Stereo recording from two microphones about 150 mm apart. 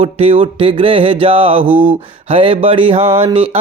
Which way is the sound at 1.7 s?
10° right (ahead or behind).